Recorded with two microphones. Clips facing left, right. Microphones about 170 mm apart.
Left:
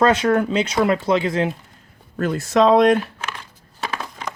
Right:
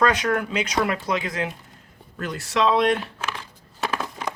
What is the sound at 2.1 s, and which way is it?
Speech, 45° left (ahead or behind).